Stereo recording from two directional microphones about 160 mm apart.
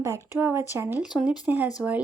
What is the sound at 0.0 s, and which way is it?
Speech, 15° right (ahead or behind).